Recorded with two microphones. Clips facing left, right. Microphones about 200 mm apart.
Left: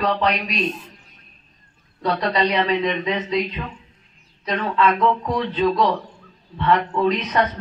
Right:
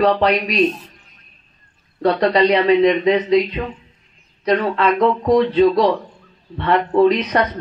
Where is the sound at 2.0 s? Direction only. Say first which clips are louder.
Right 6 dB; 45° right (ahead or behind).